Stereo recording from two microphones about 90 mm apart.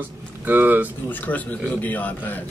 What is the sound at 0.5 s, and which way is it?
Speech, 20° right (ahead or behind).